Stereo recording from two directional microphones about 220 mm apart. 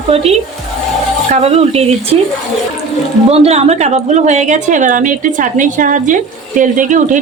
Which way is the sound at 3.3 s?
30° right (ahead or behind).